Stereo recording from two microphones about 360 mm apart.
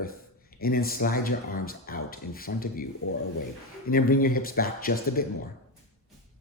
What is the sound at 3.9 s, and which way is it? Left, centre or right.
Speech, left.